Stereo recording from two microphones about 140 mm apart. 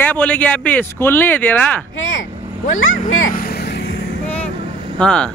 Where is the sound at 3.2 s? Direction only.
85° left.